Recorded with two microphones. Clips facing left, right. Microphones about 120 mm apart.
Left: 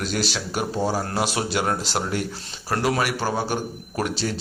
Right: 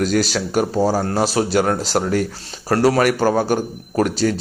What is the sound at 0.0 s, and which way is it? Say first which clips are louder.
Speech: right 8 dB; 45° right (ahead or behind).